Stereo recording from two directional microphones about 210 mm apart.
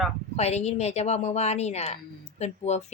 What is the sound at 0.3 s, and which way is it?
Speech, 30° left (ahead or behind).